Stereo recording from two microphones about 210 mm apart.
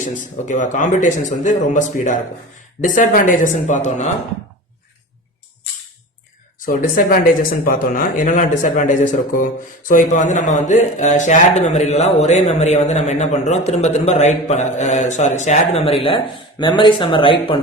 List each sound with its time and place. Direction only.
0.0 s a man's voice: 35° left (ahead or behind)
6.7 s a man's voice: 45° left (ahead or behind); by 17.6 s 25° left (ahead or behind)